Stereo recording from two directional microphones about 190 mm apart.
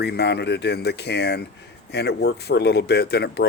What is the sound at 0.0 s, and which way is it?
Speech, 60° left (ahead or behind).